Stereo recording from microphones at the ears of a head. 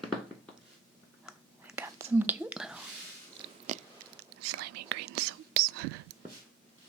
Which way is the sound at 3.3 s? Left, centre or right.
Right.